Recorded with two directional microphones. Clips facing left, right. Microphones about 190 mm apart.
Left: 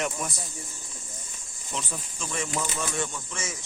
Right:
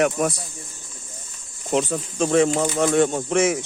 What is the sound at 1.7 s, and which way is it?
Speech, 70° right (ahead or behind).